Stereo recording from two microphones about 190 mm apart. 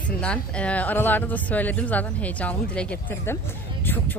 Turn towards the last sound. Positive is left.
turn(degrees=10)  # may be behind; listen again after turning